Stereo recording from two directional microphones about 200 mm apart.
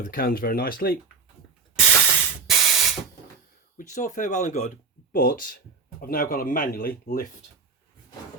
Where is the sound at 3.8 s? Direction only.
40° left (ahead or behind).